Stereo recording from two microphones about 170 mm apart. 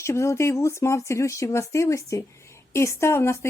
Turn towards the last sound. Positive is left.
turn(degrees=15)  # may be behind; listen again after turning